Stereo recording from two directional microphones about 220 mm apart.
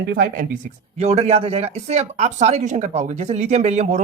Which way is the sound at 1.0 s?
30° right (ahead or behind).